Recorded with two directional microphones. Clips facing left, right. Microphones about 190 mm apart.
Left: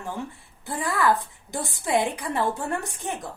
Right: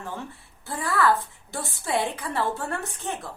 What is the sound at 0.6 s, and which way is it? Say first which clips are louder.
Speech: even; 15° left (ahead or behind).